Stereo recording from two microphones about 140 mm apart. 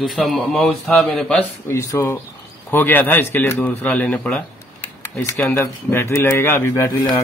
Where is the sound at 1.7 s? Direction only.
20° left (ahead or behind).